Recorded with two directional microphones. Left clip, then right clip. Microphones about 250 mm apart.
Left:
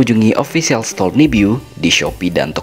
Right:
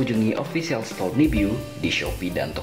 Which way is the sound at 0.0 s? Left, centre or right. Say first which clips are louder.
Left 11 dB; left.